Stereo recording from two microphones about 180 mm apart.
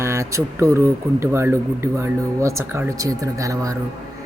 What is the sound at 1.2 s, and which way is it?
Speech, 15° right (ahead or behind).